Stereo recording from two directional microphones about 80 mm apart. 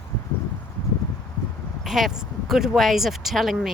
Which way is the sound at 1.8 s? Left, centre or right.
Centre.